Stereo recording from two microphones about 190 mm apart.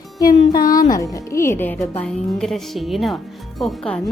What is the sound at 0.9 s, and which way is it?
Speech, 15° left (ahead or behind).